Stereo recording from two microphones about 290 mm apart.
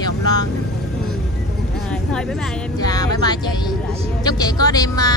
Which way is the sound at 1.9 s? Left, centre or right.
Centre.